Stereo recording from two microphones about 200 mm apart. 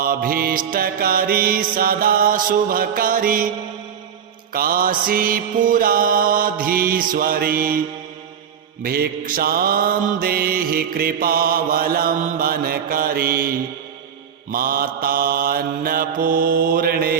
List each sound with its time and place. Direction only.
0.0 s mantra: 45° right (ahead or behind)
4.5 s mantra: 45° right (ahead or behind)